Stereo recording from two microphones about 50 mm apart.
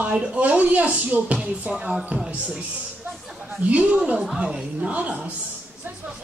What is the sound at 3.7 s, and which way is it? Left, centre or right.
Speech, right.